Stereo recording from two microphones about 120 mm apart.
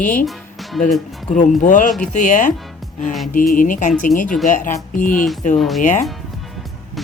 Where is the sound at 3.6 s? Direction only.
90° left.